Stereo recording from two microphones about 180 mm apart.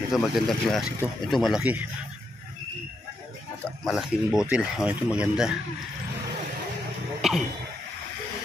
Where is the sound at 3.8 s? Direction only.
Centre (ahead or behind).